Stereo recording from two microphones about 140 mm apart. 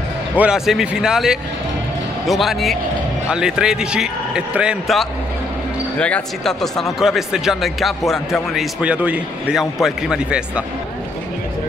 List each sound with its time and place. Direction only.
0.4 s speech: 5° right (ahead or behind)
5.9 s speech: 10° left (ahead or behind)